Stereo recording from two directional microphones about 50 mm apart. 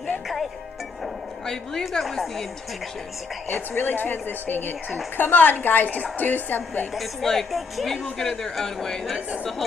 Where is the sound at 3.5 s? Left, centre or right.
Left.